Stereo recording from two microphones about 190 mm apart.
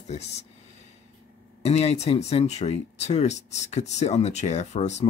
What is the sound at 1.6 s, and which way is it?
Speech, 35° left (ahead or behind).